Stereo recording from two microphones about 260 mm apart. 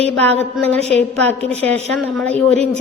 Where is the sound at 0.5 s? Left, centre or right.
Centre.